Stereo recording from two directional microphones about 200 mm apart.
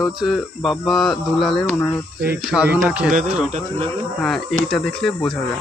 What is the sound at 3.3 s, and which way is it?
Speech, 35° right (ahead or behind).